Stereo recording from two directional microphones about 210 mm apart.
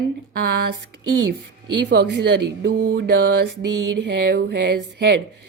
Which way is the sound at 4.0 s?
55° right (ahead or behind).